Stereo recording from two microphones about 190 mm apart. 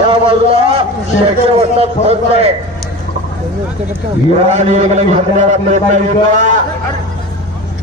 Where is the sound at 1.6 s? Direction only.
30° right (ahead or behind).